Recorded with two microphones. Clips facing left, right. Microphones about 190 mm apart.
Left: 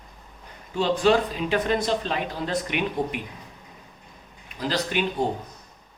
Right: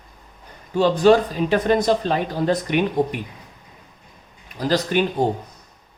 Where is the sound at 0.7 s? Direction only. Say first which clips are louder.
Right 6 dB; 45° right (ahead or behind).